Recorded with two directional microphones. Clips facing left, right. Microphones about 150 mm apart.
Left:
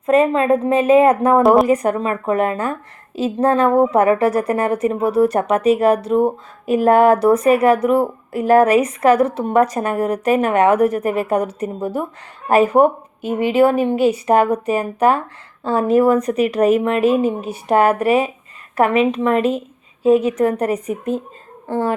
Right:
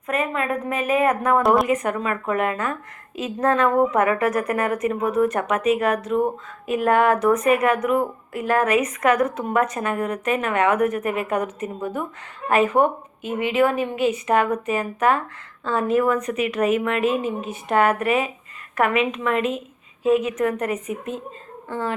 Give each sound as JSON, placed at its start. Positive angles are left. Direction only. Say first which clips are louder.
{"t": 0.0, "sound": "a woman's voice", "louder": "left 10 dB", "side_deg": 30}